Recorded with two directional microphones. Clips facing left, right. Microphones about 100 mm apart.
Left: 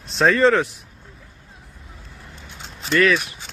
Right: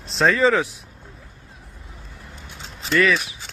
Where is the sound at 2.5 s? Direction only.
Centre (ahead or behind).